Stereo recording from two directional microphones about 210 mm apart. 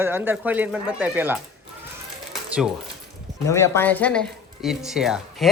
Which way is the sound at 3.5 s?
10° left (ahead or behind).